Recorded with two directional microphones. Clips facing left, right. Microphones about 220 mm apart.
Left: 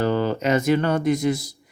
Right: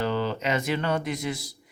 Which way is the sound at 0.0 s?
45° left (ahead or behind).